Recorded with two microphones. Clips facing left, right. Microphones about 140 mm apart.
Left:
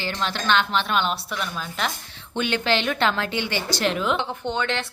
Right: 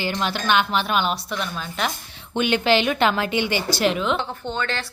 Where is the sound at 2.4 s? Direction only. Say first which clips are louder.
Right 4 dB; 15° right (ahead or behind).